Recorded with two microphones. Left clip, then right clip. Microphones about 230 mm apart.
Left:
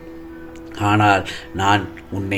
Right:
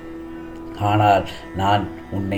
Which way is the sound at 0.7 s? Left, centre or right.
Left.